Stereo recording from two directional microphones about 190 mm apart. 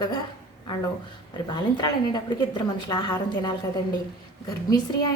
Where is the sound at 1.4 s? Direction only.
20° left (ahead or behind).